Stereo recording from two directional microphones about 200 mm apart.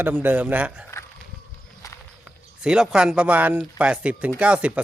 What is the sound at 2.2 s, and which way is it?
A man's voice, 5° right (ahead or behind).